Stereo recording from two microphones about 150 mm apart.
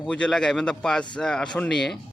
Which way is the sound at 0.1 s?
5° left (ahead or behind).